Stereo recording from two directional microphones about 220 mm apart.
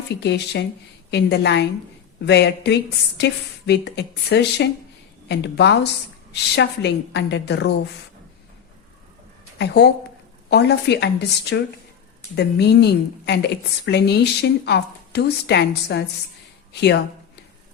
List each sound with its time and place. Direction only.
0.1 s a woman's voice: 50° left (ahead or behind)
9.6 s a woman's voice: 50° left (ahead or behind)